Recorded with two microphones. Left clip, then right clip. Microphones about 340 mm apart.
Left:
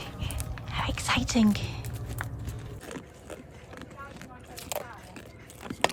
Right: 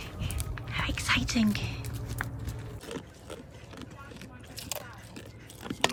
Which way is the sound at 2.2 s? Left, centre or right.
Centre.